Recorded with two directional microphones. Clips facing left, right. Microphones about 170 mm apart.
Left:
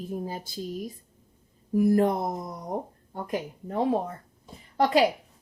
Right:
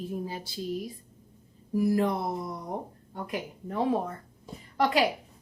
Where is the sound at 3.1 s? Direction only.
30° left (ahead or behind).